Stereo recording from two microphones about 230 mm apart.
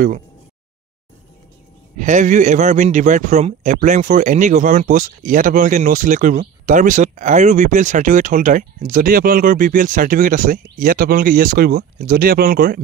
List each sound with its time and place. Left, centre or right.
2.0 s a man's voice: right